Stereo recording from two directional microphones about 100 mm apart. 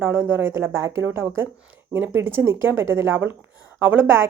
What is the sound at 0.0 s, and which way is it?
A woman's voice, 20° right (ahead or behind).